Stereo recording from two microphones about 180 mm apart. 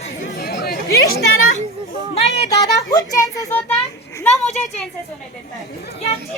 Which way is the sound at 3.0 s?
20° left (ahead or behind).